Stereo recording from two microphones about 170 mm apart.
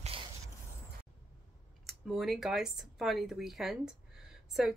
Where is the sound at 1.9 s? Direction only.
Centre (ahead or behind).